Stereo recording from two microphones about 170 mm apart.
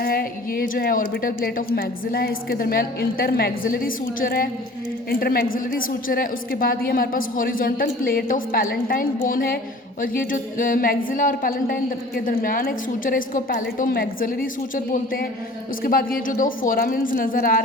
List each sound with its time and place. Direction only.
0.0 s a woman's voice: 60° left (ahead or behind)